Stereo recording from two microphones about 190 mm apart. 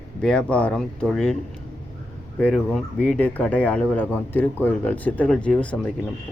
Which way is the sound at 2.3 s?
5° left (ahead or behind).